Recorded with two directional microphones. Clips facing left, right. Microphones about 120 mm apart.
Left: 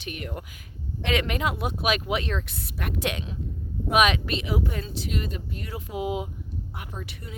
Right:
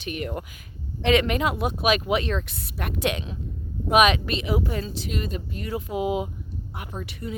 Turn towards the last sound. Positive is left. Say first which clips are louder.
# right 5 dB
turn(degrees=-30)  # may be behind; listen again after turning